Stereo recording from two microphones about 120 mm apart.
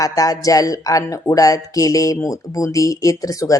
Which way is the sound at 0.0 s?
30° left (ahead or behind).